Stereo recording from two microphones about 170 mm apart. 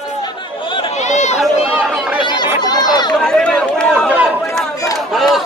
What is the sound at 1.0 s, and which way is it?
Run, 45° left (ahead or behind).